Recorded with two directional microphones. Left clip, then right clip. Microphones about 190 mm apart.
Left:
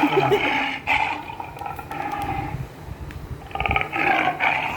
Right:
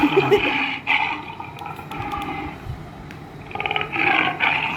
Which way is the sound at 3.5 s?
20° left (ahead or behind).